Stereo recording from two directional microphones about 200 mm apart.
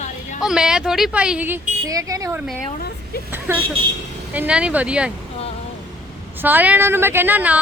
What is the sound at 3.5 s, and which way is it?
A woman's voice, 10° right (ahead or behind).